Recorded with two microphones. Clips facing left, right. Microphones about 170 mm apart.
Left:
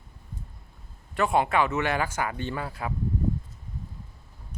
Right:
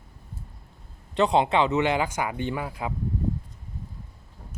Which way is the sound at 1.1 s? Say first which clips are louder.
Right 2 dB; 20° right (ahead or behind).